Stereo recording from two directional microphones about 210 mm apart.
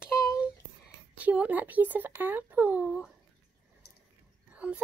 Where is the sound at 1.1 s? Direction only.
5° right (ahead or behind).